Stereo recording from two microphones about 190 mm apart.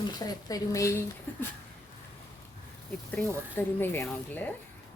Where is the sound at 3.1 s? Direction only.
10° left (ahead or behind).